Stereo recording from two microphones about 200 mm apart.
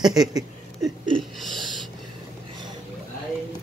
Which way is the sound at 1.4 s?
Centre (ahead or behind).